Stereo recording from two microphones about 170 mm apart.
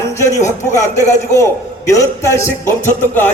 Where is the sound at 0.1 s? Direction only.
15° left (ahead or behind).